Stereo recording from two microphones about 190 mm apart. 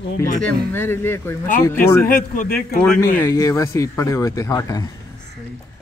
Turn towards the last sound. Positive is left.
turn(degrees=20)  # may be behind; listen again after turning